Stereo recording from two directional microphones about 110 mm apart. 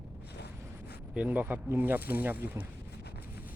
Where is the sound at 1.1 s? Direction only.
15° right (ahead or behind).